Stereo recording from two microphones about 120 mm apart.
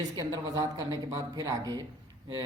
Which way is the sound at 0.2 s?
30° right (ahead or behind).